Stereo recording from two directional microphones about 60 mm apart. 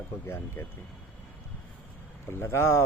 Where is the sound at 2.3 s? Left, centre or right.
Left.